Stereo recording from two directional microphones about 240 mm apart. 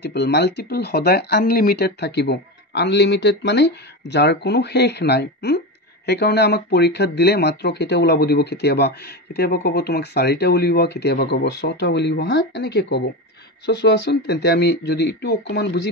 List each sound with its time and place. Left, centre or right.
0.0 s speech: left